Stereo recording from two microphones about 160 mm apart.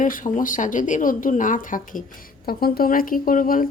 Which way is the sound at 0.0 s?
55° left (ahead or behind).